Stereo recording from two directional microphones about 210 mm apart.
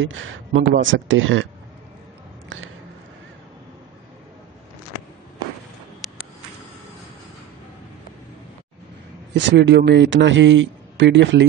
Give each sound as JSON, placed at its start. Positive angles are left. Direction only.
{"t": 0.0, "sound": "a man's voice", "side_deg": -65}
{"t": 9.3, "sound": "a man's voice", "side_deg": -55}